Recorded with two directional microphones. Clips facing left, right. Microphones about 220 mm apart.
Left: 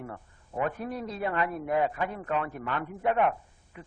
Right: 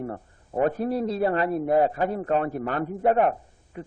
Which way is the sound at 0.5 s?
35° right (ahead or behind).